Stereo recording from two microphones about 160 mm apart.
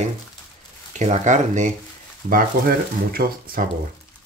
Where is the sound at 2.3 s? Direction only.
65° right (ahead or behind).